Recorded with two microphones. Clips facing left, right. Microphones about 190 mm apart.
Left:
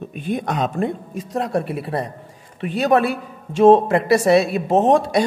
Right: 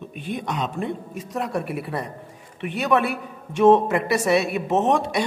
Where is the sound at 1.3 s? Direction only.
30° left (ahead or behind).